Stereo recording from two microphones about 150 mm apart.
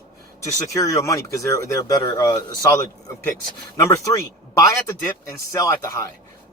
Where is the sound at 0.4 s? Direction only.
20° left (ahead or behind).